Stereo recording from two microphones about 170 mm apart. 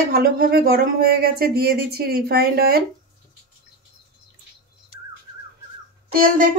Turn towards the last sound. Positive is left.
turn(degrees=-55)  # may be behind; listen again after turning